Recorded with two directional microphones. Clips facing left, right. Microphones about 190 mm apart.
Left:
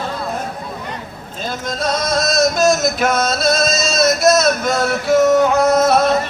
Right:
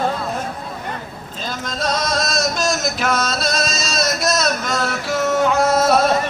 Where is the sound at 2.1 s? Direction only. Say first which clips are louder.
Left 5 dB; 50° left (ahead or behind).